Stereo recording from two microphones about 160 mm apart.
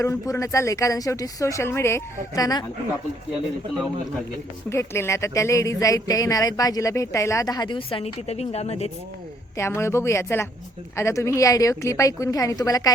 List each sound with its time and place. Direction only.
0.0 s speech: 20° left (ahead or behind)
4.7 s speech: 15° left (ahead or behind); by 8.9 s 40° left (ahead or behind)
9.6 s speech: 15° left (ahead or behind)